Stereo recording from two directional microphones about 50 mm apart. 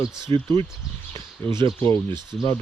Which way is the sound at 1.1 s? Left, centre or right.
Left.